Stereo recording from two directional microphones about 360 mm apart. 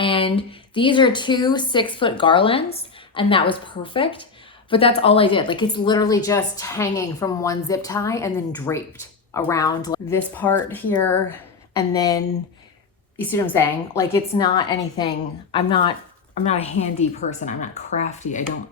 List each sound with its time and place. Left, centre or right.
0.0 s speech: centre